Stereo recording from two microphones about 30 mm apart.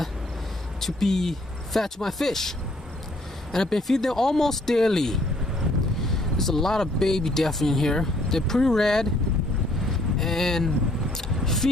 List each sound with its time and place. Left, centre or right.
0.7 s speech: centre
3.5 s speech: centre
9.8 s vehicle: centre